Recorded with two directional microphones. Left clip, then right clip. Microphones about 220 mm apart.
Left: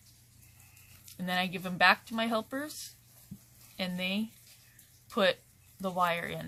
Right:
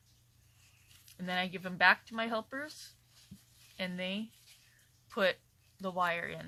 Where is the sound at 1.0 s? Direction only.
20° right (ahead or behind).